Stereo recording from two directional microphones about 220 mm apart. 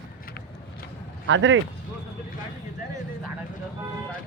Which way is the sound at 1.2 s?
60° right (ahead or behind).